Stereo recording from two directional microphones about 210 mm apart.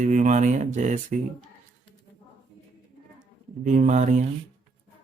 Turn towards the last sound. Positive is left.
turn(degrees=-35)  # may be behind; listen again after turning